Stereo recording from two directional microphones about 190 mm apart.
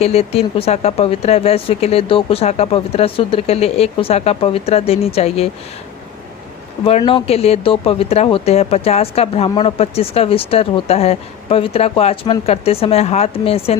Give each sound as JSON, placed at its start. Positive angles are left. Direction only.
{"t": 0.0, "sound": "speech", "side_deg": 35}
{"t": 6.8, "sound": "speech", "side_deg": 30}